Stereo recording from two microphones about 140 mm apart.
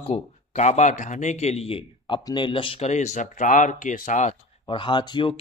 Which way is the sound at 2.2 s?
30° left (ahead or behind).